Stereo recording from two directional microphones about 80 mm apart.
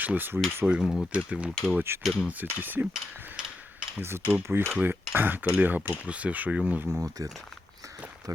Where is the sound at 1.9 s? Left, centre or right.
Right.